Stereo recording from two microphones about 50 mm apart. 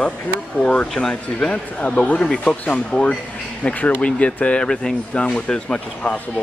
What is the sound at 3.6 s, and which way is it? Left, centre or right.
Speech, left.